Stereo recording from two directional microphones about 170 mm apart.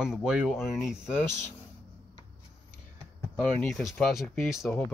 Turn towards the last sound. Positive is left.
turn(degrees=0)  # may be behind; listen again after turning